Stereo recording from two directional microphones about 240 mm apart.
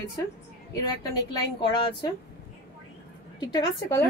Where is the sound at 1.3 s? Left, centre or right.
Centre.